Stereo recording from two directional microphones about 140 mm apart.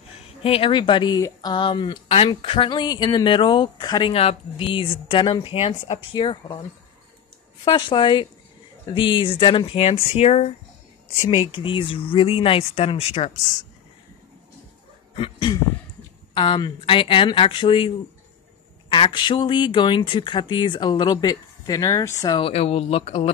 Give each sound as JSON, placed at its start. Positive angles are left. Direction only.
{"t": 0.4, "sound": "speech", "side_deg": 40}
{"t": 4.1, "sound": "speech", "side_deg": 45}
{"t": 7.6, "sound": "speech", "side_deg": 35}
{"t": 11.2, "sound": "speech", "side_deg": 40}
{"t": 15.1, "sound": "speech", "side_deg": 35}
{"t": 22.3, "sound": "speech", "side_deg": 45}